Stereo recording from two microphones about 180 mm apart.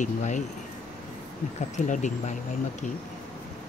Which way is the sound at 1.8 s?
45° left (ahead or behind).